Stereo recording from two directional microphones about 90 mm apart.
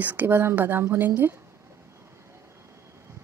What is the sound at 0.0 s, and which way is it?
Speech, 20° right (ahead or behind).